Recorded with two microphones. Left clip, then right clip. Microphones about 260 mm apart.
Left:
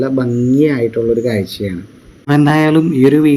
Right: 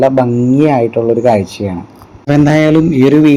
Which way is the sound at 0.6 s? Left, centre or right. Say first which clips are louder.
Right 4 dB; right.